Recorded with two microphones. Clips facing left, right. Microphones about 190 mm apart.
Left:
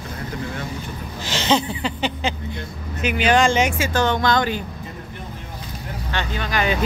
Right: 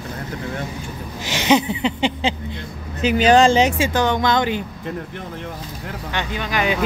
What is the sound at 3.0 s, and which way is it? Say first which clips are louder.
Speech: right 4 dB; 35° right (ahead or behind).